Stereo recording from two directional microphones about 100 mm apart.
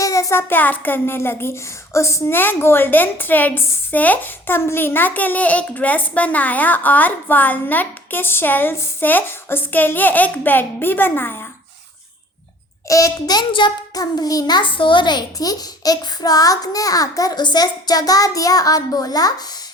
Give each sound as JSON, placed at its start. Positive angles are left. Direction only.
{"t": 0.0, "sound": "a child's voice", "side_deg": 35}
{"t": 12.9, "sound": "a child's voice", "side_deg": 35}
{"t": 13.5, "sound": "a child's voice", "side_deg": 55}
{"t": 13.9, "sound": "a child's voice", "side_deg": 40}